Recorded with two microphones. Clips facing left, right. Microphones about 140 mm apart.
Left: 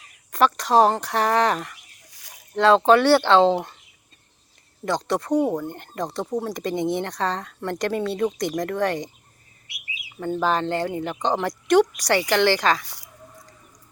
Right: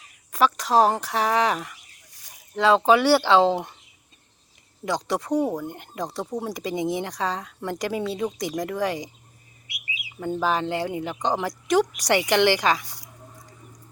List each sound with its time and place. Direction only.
0.0 s speech: 5° right (ahead or behind)
4.9 s speech: 10° right (ahead or behind)
10.2 s speech: 10° right (ahead or behind)
11.9 s speech: 15° right (ahead or behind)